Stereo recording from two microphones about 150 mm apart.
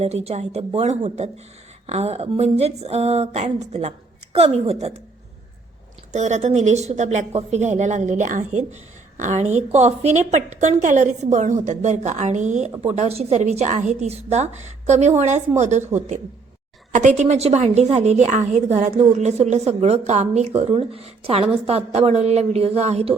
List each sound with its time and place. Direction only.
0.0 s speech: 45° right (ahead or behind)
6.1 s speech: 50° right (ahead or behind)